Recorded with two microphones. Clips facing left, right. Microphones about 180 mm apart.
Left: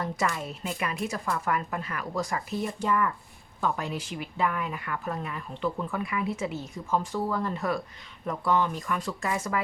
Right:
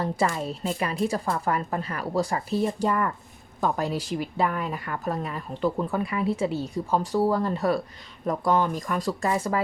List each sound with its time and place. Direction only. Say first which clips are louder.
0.0 s a woman's voice: right 4 dB; 30° right (ahead or behind)